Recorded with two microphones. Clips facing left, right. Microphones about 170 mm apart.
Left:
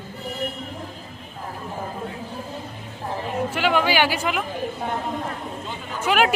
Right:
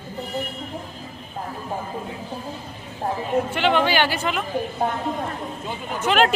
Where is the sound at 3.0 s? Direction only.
40° right (ahead or behind).